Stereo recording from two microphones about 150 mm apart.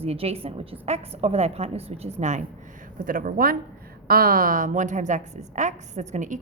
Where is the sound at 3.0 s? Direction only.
65° right (ahead or behind).